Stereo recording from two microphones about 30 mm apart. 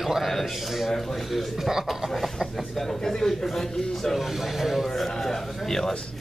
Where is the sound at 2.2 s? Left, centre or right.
Centre.